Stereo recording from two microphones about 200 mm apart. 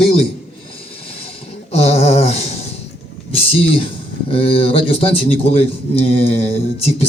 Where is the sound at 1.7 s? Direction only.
30° left (ahead or behind).